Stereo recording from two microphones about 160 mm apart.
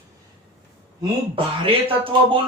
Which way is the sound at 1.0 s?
35° right (ahead or behind).